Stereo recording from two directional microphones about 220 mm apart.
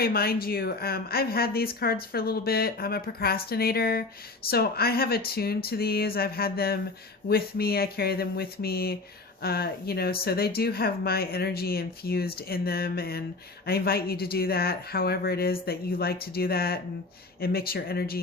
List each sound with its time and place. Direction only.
0.0 s speech: 45° left (ahead or behind)